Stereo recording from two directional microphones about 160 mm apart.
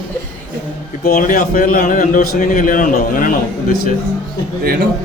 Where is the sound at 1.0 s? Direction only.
60° left (ahead or behind).